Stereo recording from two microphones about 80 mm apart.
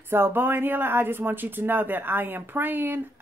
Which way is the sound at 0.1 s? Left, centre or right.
Right.